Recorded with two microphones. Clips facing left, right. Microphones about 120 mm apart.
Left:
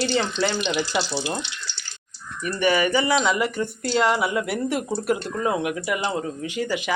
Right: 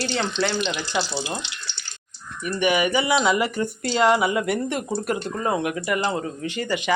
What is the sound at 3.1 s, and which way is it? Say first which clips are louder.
Speech: right 1 dB; 5° right (ahead or behind).